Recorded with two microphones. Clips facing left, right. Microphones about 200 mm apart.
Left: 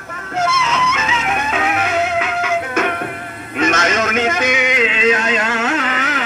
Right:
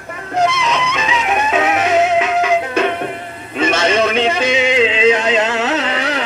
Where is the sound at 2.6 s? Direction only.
30° right (ahead or behind).